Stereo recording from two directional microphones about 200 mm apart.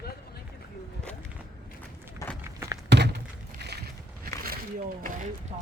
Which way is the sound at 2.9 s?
60° right (ahead or behind).